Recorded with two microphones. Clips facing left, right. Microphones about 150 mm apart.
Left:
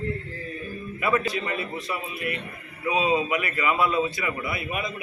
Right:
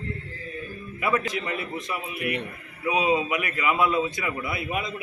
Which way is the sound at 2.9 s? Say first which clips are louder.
Even; 15° right (ahead or behind).